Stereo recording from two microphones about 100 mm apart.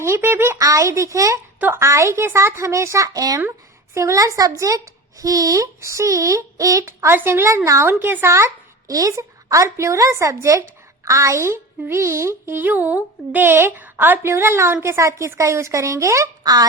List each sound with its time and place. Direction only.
0.0 s a woman's voice: 25° right (ahead or behind); by 16.6 s 40° right (ahead or behind)